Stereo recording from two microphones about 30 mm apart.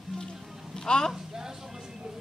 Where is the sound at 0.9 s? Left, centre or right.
Left.